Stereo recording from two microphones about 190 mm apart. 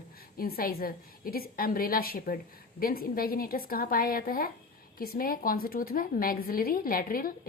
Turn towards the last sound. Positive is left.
turn(degrees=50)  # may be behind; listen again after turning